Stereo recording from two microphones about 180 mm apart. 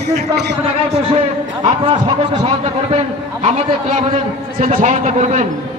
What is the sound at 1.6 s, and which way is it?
Speech, 30° right (ahead or behind).